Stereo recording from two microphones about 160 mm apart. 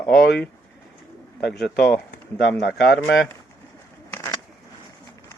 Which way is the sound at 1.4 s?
5° left (ahead or behind).